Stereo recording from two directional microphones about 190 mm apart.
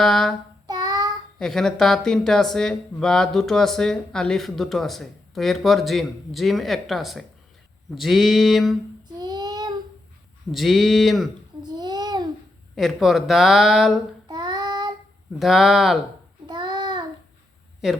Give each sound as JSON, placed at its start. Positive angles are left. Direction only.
{"t": 0.0, "sound": "speech", "side_deg": 0}
{"t": 0.7, "sound": "child singing", "side_deg": -20}
{"t": 1.4, "sound": "speech", "side_deg": 0}
{"t": 9.1, "sound": "child singing", "side_deg": -20}
{"t": 10.5, "sound": "speech", "side_deg": 0}
{"t": 11.6, "sound": "babbling", "side_deg": -20}
{"t": 12.7, "sound": "speech", "side_deg": 0}
{"t": 14.3, "sound": "child singing", "side_deg": -20}
{"t": 15.4, "sound": "speech", "side_deg": 0}
{"t": 16.5, "sound": "child singing", "side_deg": -20}
{"t": 17.8, "sound": "speech", "side_deg": 0}